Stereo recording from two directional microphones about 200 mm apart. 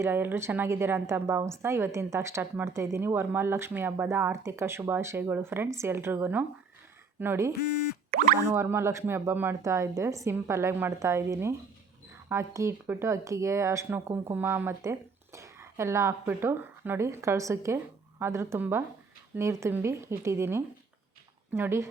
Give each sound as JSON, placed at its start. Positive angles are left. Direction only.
{"t": 0.0, "sound": "a woman's voice", "side_deg": -10}
{"t": 8.1, "sound": "speech", "side_deg": -40}
{"t": 8.4, "sound": "a woman's voice", "side_deg": -10}